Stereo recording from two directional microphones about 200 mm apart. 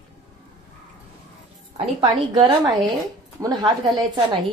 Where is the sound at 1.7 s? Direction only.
25° right (ahead or behind).